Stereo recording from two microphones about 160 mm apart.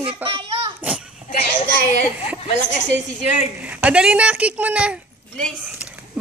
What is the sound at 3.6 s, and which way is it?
Speech, 10° right (ahead or behind).